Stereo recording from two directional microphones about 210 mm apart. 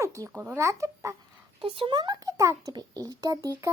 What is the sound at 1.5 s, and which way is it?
Speech, 25° right (ahead or behind).